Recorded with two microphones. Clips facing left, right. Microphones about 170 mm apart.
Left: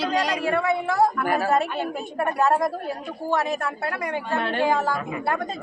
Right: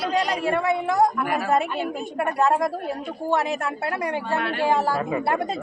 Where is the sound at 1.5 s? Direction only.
15° right (ahead or behind).